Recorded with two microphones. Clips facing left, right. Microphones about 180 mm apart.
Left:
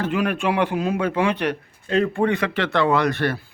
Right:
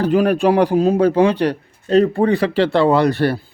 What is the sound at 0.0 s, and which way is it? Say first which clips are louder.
A man's voice: right 8 dB; 35° right (ahead or behind).